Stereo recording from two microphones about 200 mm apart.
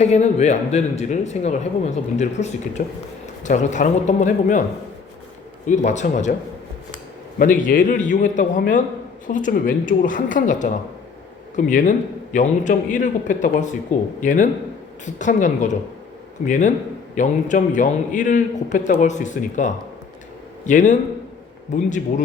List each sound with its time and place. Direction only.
0.0 s a man's voice: 35° left (ahead or behind)
5.6 s a man's voice: 35° left (ahead or behind)
7.3 s a man's voice: 45° left (ahead or behind)